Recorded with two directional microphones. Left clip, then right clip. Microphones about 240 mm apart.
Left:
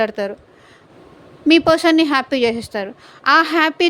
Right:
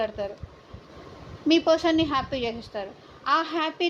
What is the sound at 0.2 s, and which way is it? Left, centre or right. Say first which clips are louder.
Speech: left 9 dB; left.